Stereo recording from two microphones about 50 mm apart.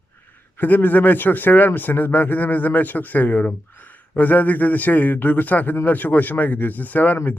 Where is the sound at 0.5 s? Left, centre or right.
Left.